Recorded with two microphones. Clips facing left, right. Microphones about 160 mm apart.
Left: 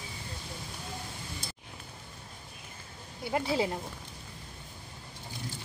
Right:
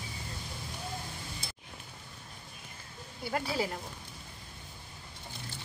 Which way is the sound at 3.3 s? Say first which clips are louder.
Left 4 dB; 20° left (ahead or behind).